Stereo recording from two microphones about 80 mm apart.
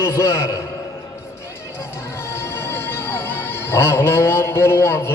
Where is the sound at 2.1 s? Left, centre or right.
Left.